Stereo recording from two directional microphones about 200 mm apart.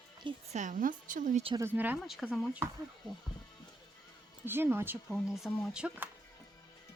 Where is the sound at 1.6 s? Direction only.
10° right (ahead or behind).